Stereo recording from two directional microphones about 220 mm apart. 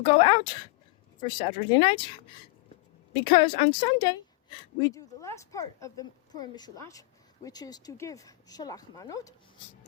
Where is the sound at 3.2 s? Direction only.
20° left (ahead or behind).